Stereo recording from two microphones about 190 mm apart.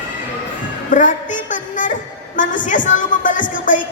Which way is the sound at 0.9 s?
45° left (ahead or behind).